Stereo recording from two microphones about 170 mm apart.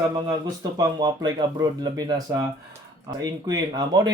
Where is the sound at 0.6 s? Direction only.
25° right (ahead or behind).